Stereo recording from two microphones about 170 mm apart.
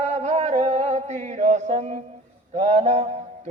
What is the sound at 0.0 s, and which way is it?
Music, 45° right (ahead or behind).